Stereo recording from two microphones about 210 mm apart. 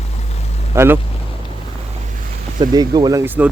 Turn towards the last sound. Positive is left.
turn(degrees=-10)  # may be behind; listen again after turning